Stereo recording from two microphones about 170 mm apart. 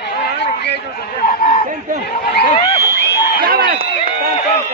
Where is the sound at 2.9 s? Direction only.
75° left (ahead or behind).